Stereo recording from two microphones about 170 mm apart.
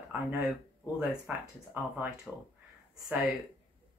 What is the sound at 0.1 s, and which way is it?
Speech, 10° right (ahead or behind).